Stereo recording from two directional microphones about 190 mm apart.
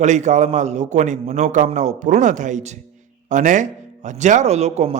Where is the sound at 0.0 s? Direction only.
40° right (ahead or behind).